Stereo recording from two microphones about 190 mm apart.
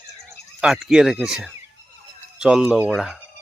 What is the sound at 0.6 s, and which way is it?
Speech, centre (ahead or behind).